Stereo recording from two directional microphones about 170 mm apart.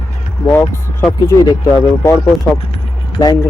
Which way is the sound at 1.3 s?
15° left (ahead or behind).